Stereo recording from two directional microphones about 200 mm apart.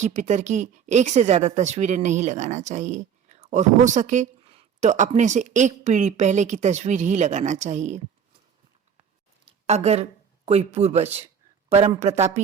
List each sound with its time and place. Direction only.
0.0 s speech: 35° right (ahead or behind)
9.5 s speech: 35° right (ahead or behind)